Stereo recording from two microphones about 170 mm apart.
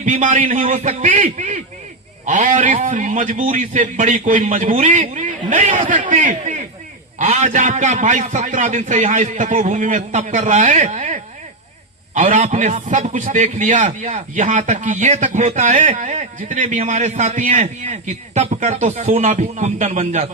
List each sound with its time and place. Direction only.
0.0 s a man's voice: 50° right (ahead or behind)